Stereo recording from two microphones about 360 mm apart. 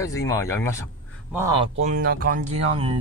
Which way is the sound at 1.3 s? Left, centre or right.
Centre.